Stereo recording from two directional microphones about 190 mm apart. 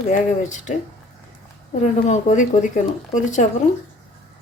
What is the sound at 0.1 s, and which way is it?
Speech, 40° left (ahead or behind).